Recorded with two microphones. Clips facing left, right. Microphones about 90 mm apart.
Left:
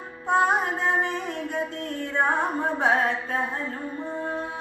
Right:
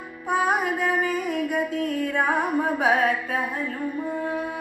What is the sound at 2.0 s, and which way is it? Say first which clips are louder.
Carnatic music: left 1 dB; 30° left (ahead or behind).